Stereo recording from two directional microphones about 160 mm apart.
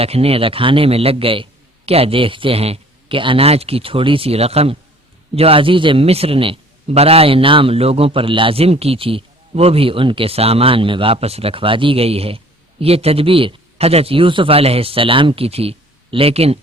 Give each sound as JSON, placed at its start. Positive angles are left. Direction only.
{"t": 0.0, "sound": "a man's voice", "side_deg": -40}